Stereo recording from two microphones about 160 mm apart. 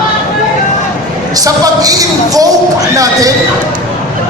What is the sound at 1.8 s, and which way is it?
Speech, 20° right (ahead or behind).